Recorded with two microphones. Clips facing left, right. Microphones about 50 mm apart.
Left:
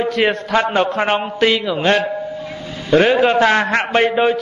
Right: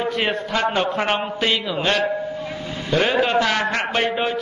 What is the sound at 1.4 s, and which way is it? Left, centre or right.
Speech, left.